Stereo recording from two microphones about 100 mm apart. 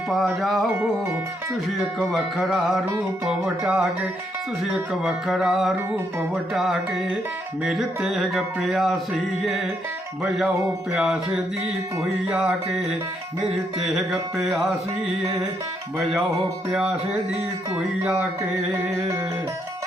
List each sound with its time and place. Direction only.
0.1 s music: centre (ahead or behind)
2.0 s music: centre (ahead or behind)
16.7 s music: 10° right (ahead or behind)
18.7 s music: 30° right (ahead or behind)